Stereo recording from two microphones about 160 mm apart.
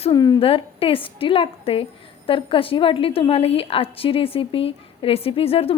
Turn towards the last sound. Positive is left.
turn(degrees=35)  # may be behind; listen again after turning